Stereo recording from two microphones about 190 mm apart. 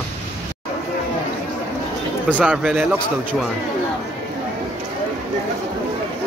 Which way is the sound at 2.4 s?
5° right (ahead or behind).